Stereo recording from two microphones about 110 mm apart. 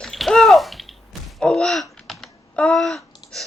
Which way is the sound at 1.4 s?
5° left (ahead or behind).